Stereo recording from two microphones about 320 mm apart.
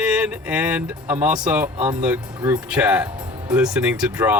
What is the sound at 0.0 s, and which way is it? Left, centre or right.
Speech, centre.